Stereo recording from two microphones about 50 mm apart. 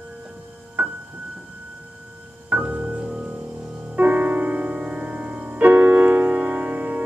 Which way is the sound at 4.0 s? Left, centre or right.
Right.